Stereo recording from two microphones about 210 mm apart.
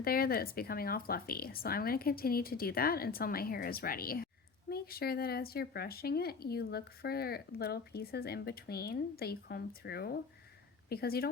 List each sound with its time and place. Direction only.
0.0 s speech: 45° left (ahead or behind)